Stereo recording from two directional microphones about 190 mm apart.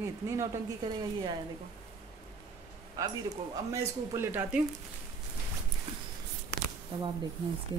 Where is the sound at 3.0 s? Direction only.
20° right (ahead or behind).